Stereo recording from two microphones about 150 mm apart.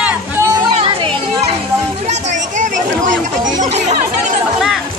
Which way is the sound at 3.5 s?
55° right (ahead or behind).